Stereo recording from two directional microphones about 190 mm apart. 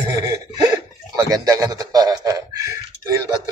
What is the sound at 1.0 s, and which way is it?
A man's voice, 20° right (ahead or behind).